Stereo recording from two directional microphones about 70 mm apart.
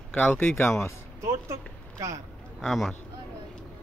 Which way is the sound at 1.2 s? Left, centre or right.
Right.